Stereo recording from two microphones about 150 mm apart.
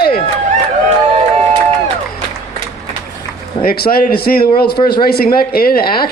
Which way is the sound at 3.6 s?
90° left.